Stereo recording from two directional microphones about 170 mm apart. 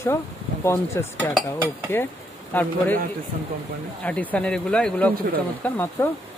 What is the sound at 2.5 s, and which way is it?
Speech, 10° left (ahead or behind).